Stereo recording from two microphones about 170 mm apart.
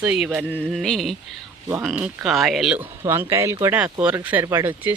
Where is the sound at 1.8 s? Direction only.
10° right (ahead or behind).